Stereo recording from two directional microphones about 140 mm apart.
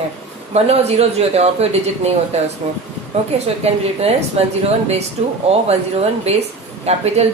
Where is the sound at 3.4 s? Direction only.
45° right (ahead or behind).